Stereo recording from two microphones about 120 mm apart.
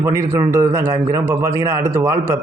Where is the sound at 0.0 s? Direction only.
25° right (ahead or behind).